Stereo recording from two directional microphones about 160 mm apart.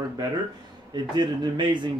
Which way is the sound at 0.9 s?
30° right (ahead or behind).